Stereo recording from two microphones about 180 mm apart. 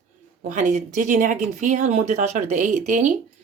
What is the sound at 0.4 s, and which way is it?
A woman's voice, 45° right (ahead or behind).